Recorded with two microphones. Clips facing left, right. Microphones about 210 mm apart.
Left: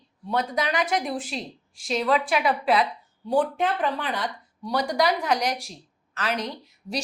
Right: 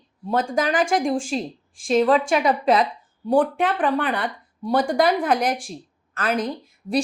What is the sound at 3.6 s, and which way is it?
A woman's voice, 80° right.